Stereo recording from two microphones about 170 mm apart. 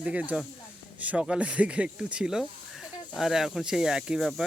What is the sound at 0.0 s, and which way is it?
Speech, 5° right (ahead or behind).